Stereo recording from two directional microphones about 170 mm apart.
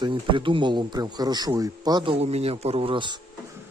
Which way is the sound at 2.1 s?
35° right (ahead or behind).